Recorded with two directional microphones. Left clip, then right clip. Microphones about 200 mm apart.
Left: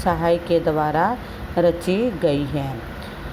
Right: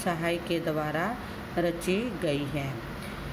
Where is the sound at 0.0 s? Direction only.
15° left (ahead or behind).